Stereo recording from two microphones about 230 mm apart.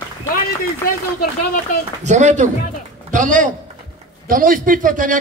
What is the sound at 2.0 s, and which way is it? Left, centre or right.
A man's voice, right.